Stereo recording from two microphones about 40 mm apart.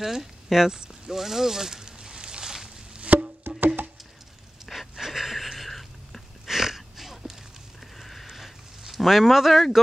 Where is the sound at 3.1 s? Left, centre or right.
Right.